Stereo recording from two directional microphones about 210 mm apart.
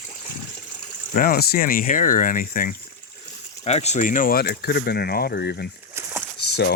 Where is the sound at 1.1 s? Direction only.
45° left (ahead or behind).